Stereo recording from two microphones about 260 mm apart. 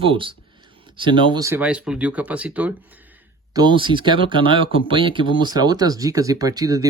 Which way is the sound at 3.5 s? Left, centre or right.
Centre.